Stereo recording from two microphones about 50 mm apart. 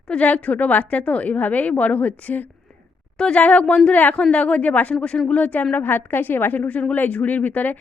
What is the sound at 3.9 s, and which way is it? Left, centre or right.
A woman's voice, left.